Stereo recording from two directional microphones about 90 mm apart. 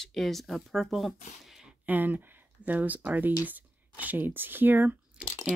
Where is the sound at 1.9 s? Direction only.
20° right (ahead or behind).